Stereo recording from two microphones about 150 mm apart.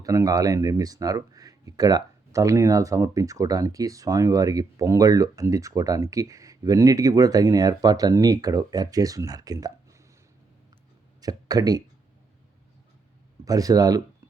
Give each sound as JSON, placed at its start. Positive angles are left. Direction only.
{"t": 0.0, "sound": "speech", "side_deg": -20}
{"t": 11.2, "sound": "speech", "side_deg": -25}
{"t": 13.4, "sound": "speech", "side_deg": -25}